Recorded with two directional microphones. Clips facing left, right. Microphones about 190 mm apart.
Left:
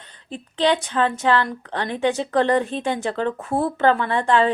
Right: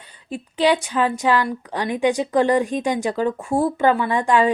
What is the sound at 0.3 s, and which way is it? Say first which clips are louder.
A woman's voice: right 2 dB; 10° right (ahead or behind).